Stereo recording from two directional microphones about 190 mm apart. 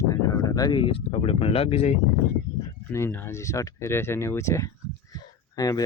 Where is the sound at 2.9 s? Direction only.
10° left (ahead or behind).